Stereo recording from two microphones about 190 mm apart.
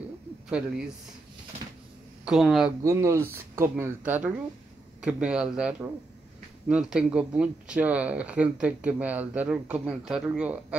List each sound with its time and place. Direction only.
0.5 s speech: 5° right (ahead or behind)
2.2 s speech: centre (ahead or behind)
2.8 s speech: 15° right (ahead or behind)